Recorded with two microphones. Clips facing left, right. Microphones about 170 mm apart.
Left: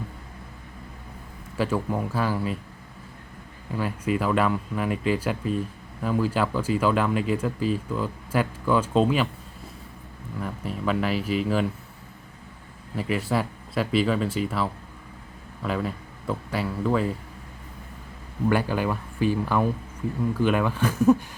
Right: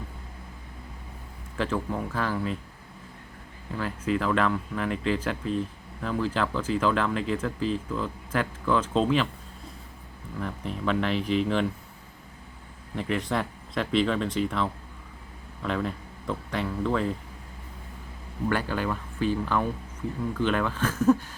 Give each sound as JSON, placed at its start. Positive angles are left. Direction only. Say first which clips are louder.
{"t": 1.5, "sound": "speech", "louder": "left 3 dB", "side_deg": 10}
{"t": 3.8, "sound": "speech", "louder": "left 2 dB", "side_deg": 15}
{"t": 10.4, "sound": "speech", "louder": "left 1 dB", "side_deg": 5}
{"t": 13.0, "sound": "speech", "louder": "left 2 dB", "side_deg": 5}
{"t": 18.4, "sound": "speech", "louder": "left 4 dB", "side_deg": 15}